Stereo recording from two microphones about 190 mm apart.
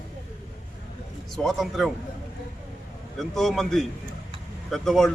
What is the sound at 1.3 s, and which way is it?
Speech, centre (ahead or behind).